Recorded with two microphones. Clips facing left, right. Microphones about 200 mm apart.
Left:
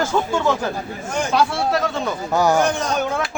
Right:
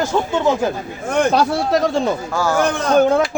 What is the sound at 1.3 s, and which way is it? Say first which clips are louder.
Speech: right 3 dB; 40° right (ahead or behind).